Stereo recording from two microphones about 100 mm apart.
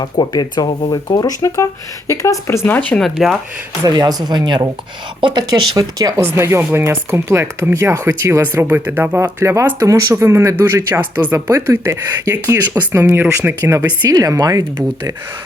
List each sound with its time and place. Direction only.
0.0 s speech: 45° left (ahead or behind); by 3.0 s 20° left (ahead or behind)
3.0 s speech: 5° right (ahead or behind)
3.8 s speech: 40° right (ahead or behind)
6.1 s speech: 25° right (ahead or behind)
8.6 s speech: 20° right (ahead or behind)
14.1 s speech: 40° right (ahead or behind)